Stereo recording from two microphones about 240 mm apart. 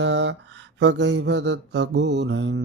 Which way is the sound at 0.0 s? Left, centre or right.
Right.